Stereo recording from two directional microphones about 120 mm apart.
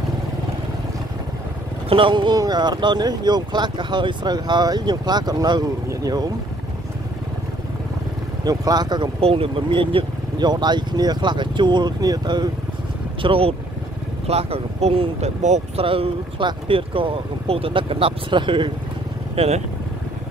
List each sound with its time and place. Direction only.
1.9 s speech: 45° right (ahead or behind)
8.5 s speech: 35° right (ahead or behind)
9.2 s speech: 50° right (ahead or behind); by 12.4 s 35° right (ahead or behind)
13.2 s speech: 50° right (ahead or behind); by 15.8 s 70° right (ahead or behind)
15.8 s speech: 50° right (ahead or behind)
19.3 s speech: 60° right (ahead or behind)